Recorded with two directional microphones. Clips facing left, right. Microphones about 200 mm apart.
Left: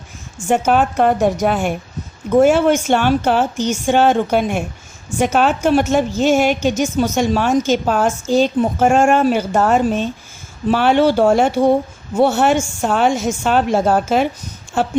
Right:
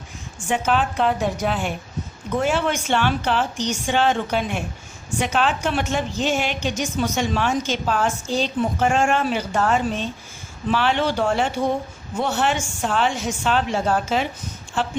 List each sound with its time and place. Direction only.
0.4 s a woman's voice: 45° left (ahead or behind)